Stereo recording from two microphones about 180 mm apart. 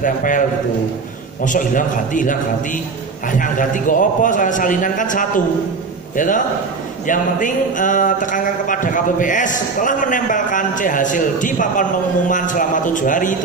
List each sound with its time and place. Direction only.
0.0 s speech: 50° left (ahead or behind)
1.4 s speech: 45° left (ahead or behind)